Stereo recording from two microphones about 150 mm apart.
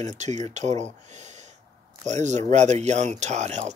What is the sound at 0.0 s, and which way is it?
Speech, 50° right (ahead or behind).